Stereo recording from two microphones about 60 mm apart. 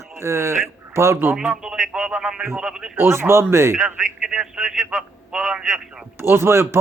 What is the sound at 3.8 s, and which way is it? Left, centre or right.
Speech, centre.